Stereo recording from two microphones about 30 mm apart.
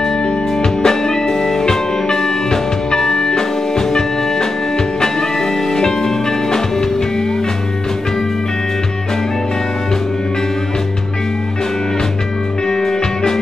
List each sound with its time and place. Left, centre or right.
0.8 s music: centre
5.7 s music: centre
12.6 s music: left